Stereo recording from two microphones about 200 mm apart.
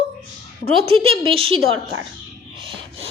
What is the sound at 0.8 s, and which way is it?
Speech, 25° right (ahead or behind).